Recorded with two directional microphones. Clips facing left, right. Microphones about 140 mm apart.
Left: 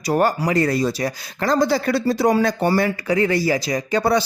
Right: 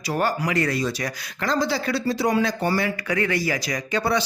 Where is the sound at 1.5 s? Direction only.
50° left (ahead or behind).